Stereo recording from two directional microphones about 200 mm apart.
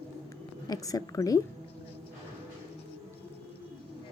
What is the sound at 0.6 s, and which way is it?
Speech, 20° left (ahead or behind).